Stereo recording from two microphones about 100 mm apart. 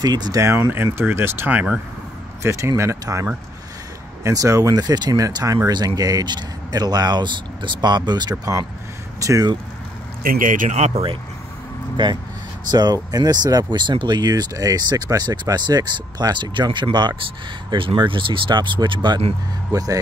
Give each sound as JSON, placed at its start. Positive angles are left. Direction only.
{"t": 0.0, "sound": "speech", "side_deg": -45}
{"t": 0.4, "sound": "speech", "side_deg": -25}
{"t": 10.8, "sound": "speech", "side_deg": -75}
{"t": 12.0, "sound": "speech", "side_deg": -55}
{"t": 12.7, "sound": "speech", "side_deg": -40}
{"t": 19.7, "sound": "speech", "side_deg": -35}